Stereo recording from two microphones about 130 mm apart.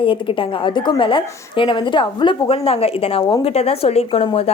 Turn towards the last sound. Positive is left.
turn(degrees=55)  # may be behind; listen again after turning